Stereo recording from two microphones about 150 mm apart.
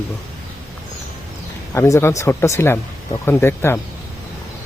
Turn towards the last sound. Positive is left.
turn(degrees=15)  # may be behind; listen again after turning